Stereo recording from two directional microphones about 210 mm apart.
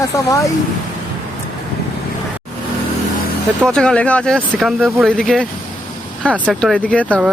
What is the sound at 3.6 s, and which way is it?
Speech, 5° left (ahead or behind).